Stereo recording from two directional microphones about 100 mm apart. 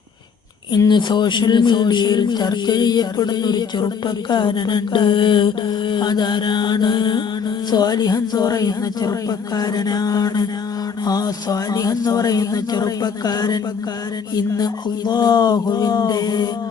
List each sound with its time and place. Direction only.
0.9 s a man's voice: 50° left (ahead or behind)